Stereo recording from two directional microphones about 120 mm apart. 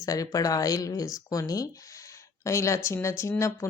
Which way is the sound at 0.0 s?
30° left (ahead or behind).